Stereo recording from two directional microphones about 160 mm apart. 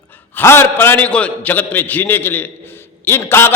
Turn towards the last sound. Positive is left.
turn(degrees=15)  # may be behind; listen again after turning